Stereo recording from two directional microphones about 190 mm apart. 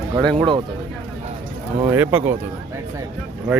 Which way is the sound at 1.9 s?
10° right (ahead or behind).